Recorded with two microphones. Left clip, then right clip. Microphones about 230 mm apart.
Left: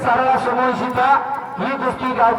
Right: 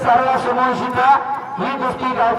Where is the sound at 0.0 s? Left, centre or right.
Right.